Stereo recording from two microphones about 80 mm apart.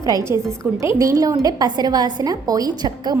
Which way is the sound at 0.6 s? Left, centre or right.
Right.